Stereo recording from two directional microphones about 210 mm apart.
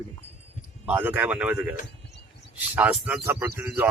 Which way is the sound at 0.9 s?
10° right (ahead or behind).